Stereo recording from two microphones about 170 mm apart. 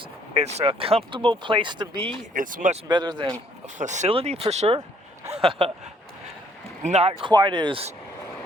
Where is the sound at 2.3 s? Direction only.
50° right (ahead or behind).